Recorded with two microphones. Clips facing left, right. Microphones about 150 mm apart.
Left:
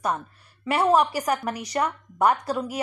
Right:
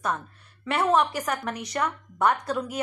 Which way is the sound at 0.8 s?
10° left (ahead or behind).